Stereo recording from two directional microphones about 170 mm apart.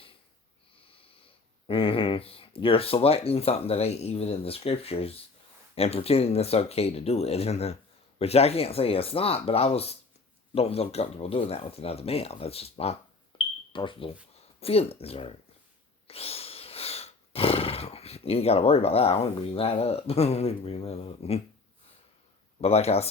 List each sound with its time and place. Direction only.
1.6 s speech: 30° left (ahead or behind)
16.0 s roar: 35° left (ahead or behind)
22.6 s speech: 35° left (ahead or behind)